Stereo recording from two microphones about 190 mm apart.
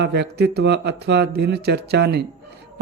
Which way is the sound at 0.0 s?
60° right (ahead or behind).